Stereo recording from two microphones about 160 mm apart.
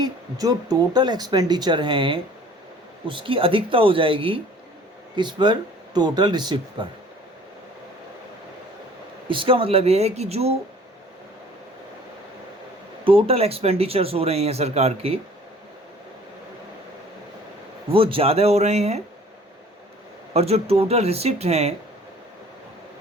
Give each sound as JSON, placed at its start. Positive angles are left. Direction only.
{"t": 0.0, "sound": "speech", "side_deg": -20}
{"t": 9.2, "sound": "speech", "side_deg": -30}
{"t": 13.1, "sound": "speech", "side_deg": -35}
{"t": 17.8, "sound": "speech", "side_deg": -35}
{"t": 20.3, "sound": "speech", "side_deg": -40}